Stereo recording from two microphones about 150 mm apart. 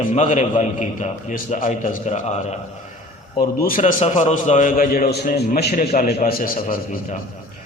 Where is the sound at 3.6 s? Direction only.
65° left (ahead or behind).